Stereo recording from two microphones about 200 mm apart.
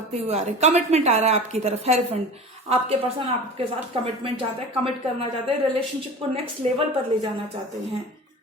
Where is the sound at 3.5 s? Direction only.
25° right (ahead or behind).